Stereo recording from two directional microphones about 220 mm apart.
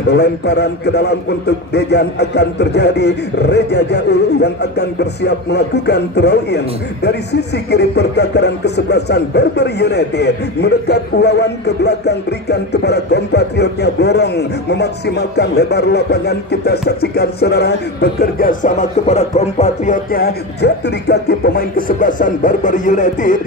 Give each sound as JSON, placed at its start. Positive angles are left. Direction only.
{"t": 0.1, "sound": "a man's voice", "side_deg": 50}